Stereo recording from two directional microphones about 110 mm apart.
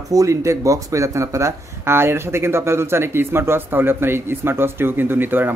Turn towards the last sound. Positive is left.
turn(degrees=-20)  # may be behind; listen again after turning